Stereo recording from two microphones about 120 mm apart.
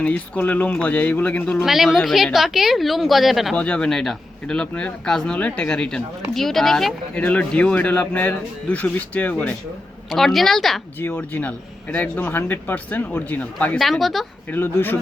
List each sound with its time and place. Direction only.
0.0 s speech: 10° left (ahead or behind)
1.6 s a woman's voice: centre (ahead or behind)
3.5 s speech: 10° left (ahead or behind)
10.1 s a woman's voice: centre (ahead or behind)
11.0 s speech: 15° left (ahead or behind)
13.7 s a woman's voice: centre (ahead or behind)
14.5 s speech: 15° left (ahead or behind)